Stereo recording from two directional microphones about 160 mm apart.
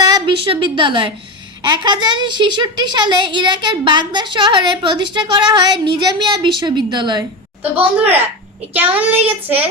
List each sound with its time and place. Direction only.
0.1 s a woman's voice: 30° right (ahead or behind)
7.9 s a child's voice: 10° right (ahead or behind)